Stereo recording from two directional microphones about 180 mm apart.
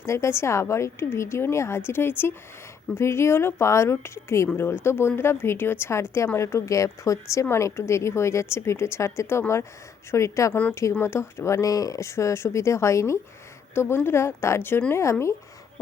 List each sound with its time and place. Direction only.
0.0 s speech: 15° left (ahead or behind)